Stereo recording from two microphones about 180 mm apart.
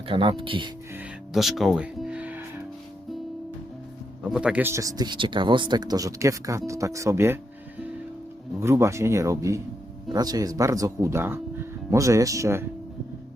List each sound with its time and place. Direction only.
0.1 s speech: 30° right (ahead or behind)
0.9 s speech: centre (ahead or behind)
4.3 s speech: 5° right (ahead or behind)
8.6 s speech: 15° right (ahead or behind)